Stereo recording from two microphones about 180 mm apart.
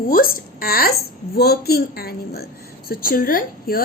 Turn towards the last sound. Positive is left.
turn(degrees=50)  # may be behind; listen again after turning